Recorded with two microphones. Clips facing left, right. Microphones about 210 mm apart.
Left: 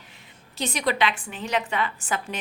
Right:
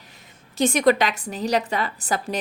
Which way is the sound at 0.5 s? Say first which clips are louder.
Right 9 dB; 45° right (ahead or behind).